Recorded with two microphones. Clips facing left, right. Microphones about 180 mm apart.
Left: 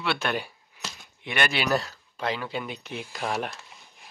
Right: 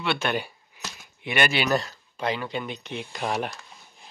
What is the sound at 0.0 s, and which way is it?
Speech, centre (ahead or behind).